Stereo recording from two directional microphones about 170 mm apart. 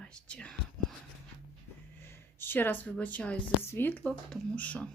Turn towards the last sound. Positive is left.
turn(degrees=5)  # may be behind; listen again after turning